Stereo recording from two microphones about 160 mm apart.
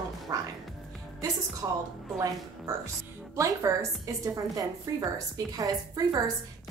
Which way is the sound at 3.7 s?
20° right (ahead or behind).